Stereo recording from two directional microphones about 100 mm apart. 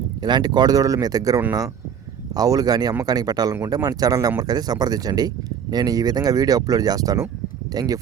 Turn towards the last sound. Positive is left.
turn(degrees=-35)  # may be behind; listen again after turning